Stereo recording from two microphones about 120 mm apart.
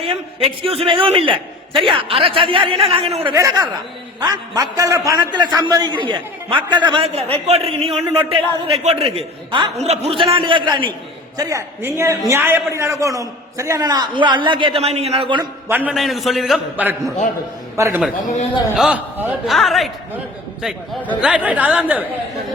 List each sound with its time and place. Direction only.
0.4 s a man's voice: 55° right (ahead or behind)
3.3 s a man's voice: 30° right (ahead or behind)
7.0 s a man's voice: 55° right (ahead or behind)
9.7 s a man's voice: 65° right (ahead or behind); by 10.9 s 45° right (ahead or behind)
11.3 s a man's voice: 30° right (ahead or behind)
11.8 s a man's voice: 20° right (ahead or behind); by 15.4 s 55° right (ahead or behind)
15.7 s speech: 15° right (ahead or behind)
16.0 s a man's voice: centre (ahead or behind)
16.8 s speech: 10° right (ahead or behind)
17.7 s speech: 25° right (ahead or behind)
18.8 s speech: 10° right (ahead or behind)
19.5 s a man's voice: centre (ahead or behind)